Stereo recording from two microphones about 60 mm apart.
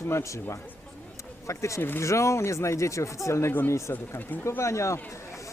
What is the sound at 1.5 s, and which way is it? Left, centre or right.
A man's voice, left.